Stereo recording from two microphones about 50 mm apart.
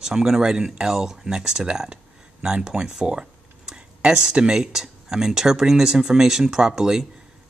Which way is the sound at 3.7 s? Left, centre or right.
Centre.